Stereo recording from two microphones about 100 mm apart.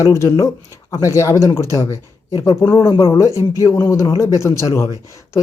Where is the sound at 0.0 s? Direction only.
30° left (ahead or behind).